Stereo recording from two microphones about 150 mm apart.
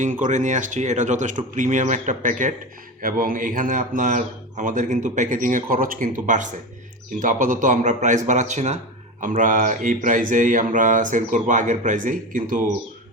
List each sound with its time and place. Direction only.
0.0 s speech: 60° right (ahead or behind)
3.0 s speech: 70° right (ahead or behind); by 8.8 s 50° right (ahead or behind)
9.2 s speech: 60° right (ahead or behind)